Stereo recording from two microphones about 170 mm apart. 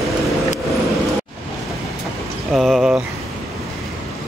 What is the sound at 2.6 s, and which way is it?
Speech, centre (ahead or behind).